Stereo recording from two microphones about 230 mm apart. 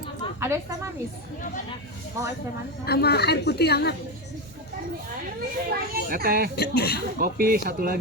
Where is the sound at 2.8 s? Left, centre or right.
Left.